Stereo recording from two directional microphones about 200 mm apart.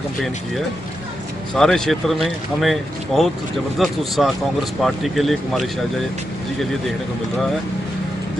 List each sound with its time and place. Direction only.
1.5 s speech: centre (ahead or behind)